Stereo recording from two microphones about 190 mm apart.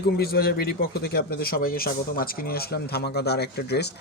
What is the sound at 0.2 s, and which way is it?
A man's voice, 55° left (ahead or behind).